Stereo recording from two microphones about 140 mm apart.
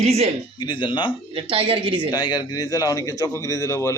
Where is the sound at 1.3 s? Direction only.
40° right (ahead or behind).